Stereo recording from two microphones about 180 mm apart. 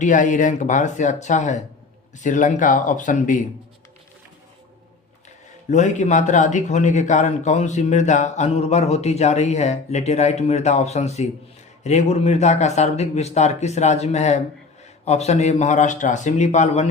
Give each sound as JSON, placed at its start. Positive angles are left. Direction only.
{"t": 0.0, "sound": "speech", "side_deg": 45}
{"t": 5.7, "sound": "speech", "side_deg": 40}